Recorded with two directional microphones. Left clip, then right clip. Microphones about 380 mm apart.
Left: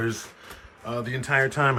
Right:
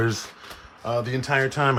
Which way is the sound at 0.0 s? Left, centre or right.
Centre.